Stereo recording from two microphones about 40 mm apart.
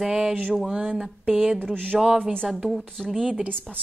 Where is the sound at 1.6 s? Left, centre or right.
Right.